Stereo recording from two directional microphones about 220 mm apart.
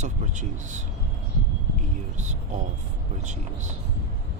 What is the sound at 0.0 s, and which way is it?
Speech, 35° right (ahead or behind).